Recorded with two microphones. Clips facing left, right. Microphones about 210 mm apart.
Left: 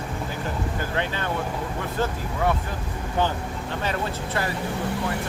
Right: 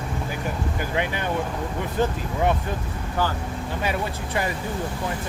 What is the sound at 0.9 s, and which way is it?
Speech, 15° right (ahead or behind).